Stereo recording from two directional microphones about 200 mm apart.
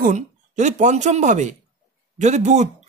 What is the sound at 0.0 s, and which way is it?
Speech, 40° right (ahead or behind).